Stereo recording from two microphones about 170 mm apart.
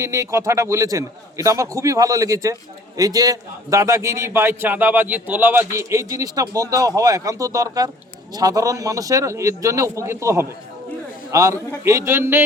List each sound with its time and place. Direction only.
0.0 s a man's voice: 15° right (ahead or behind)